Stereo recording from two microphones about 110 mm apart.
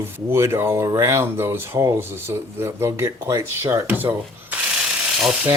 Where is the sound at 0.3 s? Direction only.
25° right (ahead or behind).